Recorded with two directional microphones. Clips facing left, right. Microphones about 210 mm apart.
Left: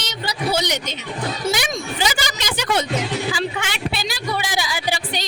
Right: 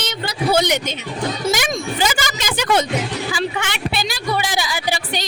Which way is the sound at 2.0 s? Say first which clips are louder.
Right 2 dB; 50° right (ahead or behind).